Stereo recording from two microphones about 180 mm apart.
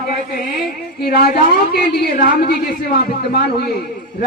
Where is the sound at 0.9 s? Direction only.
55° left (ahead or behind).